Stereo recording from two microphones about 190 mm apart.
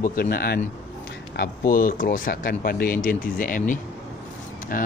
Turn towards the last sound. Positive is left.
turn(degrees=50)  # may be behind; listen again after turning